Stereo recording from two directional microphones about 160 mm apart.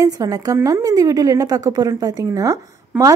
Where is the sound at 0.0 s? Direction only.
20° right (ahead or behind).